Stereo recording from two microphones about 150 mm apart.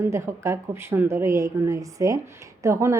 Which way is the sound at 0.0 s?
20° right (ahead or behind).